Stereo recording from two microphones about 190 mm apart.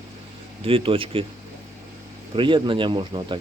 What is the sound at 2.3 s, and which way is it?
Speech, 25° right (ahead or behind).